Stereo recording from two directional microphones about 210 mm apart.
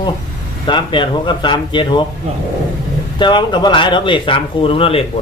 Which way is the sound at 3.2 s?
20° left (ahead or behind).